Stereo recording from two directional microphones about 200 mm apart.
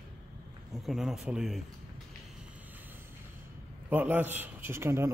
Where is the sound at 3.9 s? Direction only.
10° right (ahead or behind).